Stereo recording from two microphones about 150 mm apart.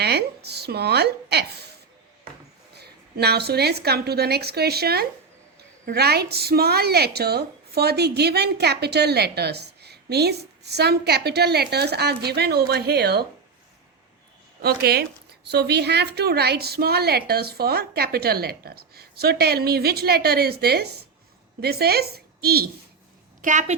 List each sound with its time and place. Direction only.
0.0 s a woman's voice: 90° right
2.8 s a woman's voice: 90° right
14.6 s a woman's voice: 90° right
23.4 s a woman's voice: 55° right (ahead or behind)